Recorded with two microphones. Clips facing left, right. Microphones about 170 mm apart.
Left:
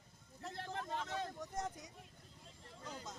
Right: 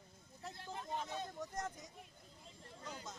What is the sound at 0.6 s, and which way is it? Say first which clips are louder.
Vehicle: left 1 dB; 85° left.